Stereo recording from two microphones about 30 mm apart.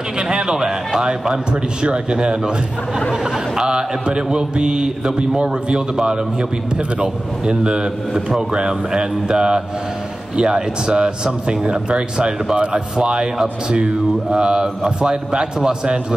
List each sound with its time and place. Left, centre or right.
0.2 s speech: right
3.5 s speech: right
7.4 s speech: right